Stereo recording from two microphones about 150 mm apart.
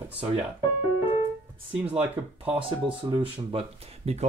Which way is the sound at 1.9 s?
10° right (ahead or behind).